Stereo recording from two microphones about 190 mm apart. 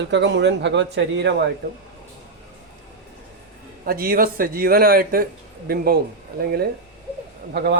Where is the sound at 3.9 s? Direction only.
50° right (ahead or behind).